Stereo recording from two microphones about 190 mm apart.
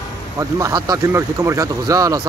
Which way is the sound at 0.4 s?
15° right (ahead or behind).